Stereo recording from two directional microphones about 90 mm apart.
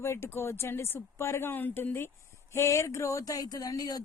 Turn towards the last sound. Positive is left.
turn(degrees=45)  # may be behind; listen again after turning